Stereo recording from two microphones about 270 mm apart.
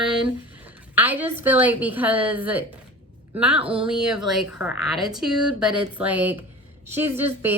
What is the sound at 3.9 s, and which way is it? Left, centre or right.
A woman's voice, centre.